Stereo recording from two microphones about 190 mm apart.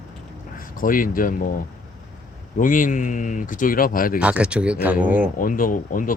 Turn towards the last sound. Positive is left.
turn(degrees=45)  # may be behind; listen again after turning